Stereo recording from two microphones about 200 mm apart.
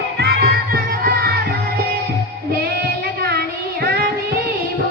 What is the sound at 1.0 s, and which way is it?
Music, 50° right (ahead or behind).